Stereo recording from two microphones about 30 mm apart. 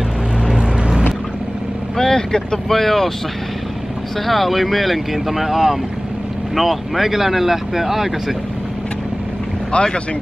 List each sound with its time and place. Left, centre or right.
0.6 s vehicle: right
2.0 s speech: centre
2.7 s speech: centre
4.3 s speech: centre
9.7 s speech: left